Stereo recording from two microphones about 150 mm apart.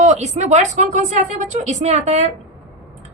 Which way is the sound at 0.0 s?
50° right (ahead or behind).